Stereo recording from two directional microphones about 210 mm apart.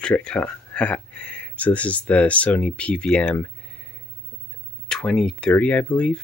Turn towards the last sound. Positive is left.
turn(degrees=5)  # may be behind; listen again after turning